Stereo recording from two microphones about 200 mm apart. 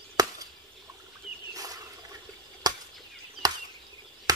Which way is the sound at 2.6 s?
20° right (ahead or behind).